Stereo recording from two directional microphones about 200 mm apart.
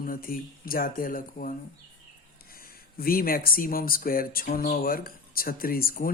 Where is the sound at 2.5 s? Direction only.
50° left (ahead or behind).